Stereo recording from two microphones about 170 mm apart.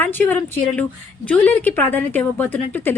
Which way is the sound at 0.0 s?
10° left (ahead or behind).